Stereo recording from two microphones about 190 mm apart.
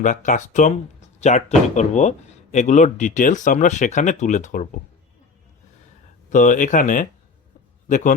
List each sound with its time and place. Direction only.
0.0 s speech: 40° left (ahead or behind)
6.3 s a man's voice: 45° left (ahead or behind)